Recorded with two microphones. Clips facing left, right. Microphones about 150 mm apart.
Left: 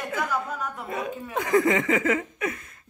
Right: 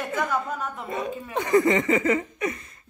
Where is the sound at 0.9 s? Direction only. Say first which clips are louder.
Right 1 dB; centre (ahead or behind).